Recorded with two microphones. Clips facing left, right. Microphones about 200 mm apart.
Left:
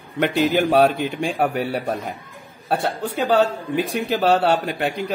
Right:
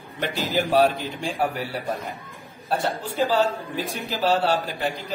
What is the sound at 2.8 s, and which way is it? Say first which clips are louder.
A man's voice: left 1 dB; 65° left (ahead or behind).